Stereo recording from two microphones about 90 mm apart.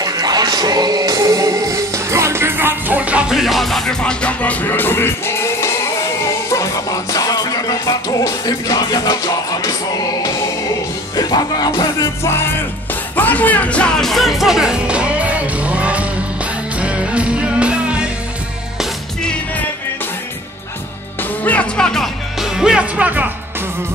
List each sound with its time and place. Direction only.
0.0 s music: 45° right (ahead or behind); by 9.8 s 45° left (ahead or behind)
11.1 s music: 50° left (ahead or behind)
12.2 s music: 30° left (ahead or behind)
13.1 s speech: 20° left (ahead or behind); by 16.1 s 15° right (ahead or behind)
16.8 s music: 15° right (ahead or behind)
21.2 s music: 15° left (ahead or behind)
22.6 s speech: 10° right (ahead or behind)